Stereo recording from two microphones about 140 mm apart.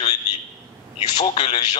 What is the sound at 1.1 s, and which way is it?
Speech, 45° left (ahead or behind).